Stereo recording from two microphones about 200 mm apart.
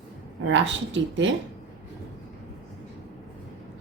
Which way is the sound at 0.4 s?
70° right (ahead or behind).